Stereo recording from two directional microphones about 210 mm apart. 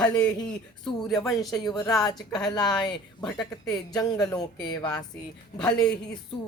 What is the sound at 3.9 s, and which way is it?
Speech, 20° left (ahead or behind).